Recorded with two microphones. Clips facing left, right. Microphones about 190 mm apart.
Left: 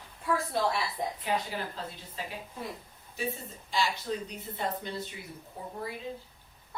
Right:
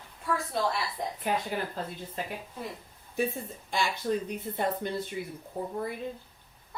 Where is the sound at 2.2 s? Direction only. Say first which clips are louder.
Right 4 dB; 55° right (ahead or behind).